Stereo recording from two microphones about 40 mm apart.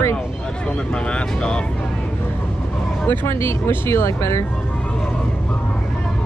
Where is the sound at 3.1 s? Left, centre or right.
Left.